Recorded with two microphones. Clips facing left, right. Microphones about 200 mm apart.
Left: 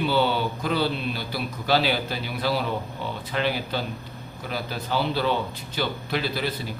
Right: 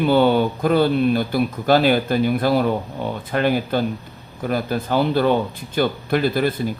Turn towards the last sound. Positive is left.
turn(degrees=-50)  # may be behind; listen again after turning